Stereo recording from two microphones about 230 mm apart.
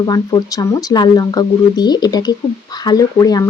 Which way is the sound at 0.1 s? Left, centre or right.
Centre.